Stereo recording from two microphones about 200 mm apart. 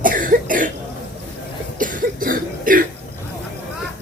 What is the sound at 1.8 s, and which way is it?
Cough, 40° right (ahead or behind).